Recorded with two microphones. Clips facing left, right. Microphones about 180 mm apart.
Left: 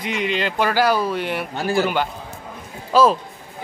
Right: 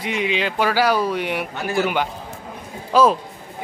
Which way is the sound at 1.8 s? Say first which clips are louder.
Right 2 dB; 5° right (ahead or behind).